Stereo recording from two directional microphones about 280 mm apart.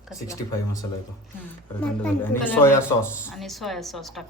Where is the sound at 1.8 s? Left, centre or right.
Centre.